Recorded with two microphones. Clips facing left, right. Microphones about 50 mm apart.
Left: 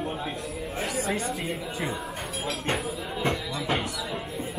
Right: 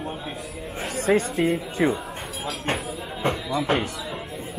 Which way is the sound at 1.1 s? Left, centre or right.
Right.